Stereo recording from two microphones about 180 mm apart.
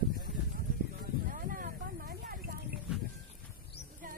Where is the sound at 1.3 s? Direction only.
50° right (ahead or behind).